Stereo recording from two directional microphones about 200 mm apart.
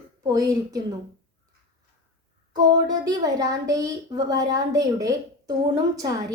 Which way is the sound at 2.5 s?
20° right (ahead or behind).